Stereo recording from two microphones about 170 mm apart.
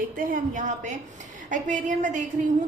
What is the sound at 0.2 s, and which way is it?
A woman's voice, 50° right (ahead or behind).